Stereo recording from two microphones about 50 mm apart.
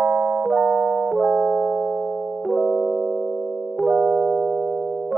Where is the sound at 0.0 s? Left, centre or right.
Right; by 3.0 s centre.